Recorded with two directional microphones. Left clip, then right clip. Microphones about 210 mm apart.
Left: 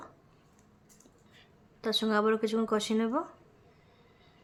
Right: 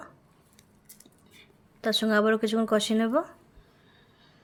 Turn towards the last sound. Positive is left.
turn(degrees=-15)  # may be behind; listen again after turning